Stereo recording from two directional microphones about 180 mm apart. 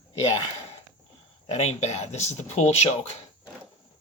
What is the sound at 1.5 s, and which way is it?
Speech, 40° left (ahead or behind).